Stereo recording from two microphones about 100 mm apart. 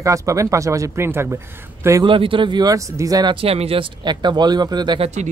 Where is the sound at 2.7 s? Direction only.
35° right (ahead or behind).